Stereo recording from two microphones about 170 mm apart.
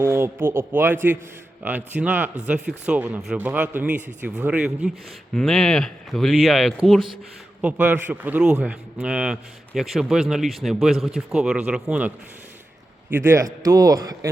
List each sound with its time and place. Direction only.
0.0 s a man's voice: 15° right (ahead or behind)